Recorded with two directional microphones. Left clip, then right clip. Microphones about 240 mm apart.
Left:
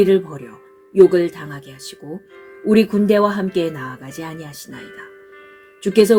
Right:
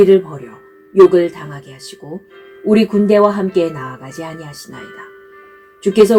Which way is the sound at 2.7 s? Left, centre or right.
Left.